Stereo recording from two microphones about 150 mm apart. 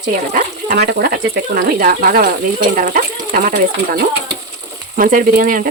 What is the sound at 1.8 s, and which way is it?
Speech, 70° right (ahead or behind).